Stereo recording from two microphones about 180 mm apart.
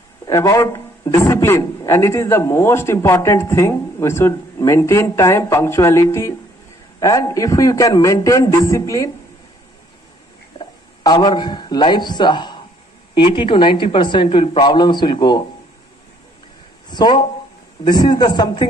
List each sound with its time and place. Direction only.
0.3 s a man's voice: 15° left (ahead or behind)
10.6 s a sound: 25° left (ahead or behind)
11.9 s a man's voice: 25° left (ahead or behind)
16.9 s speech: 25° left (ahead or behind)